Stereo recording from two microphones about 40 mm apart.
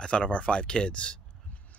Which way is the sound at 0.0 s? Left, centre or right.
Left.